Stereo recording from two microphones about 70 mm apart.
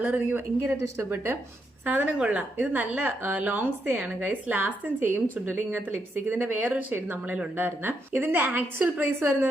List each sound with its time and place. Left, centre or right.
0.0 s a woman's voice: right
1.1 s speech: right
1.8 s a woman's voice: right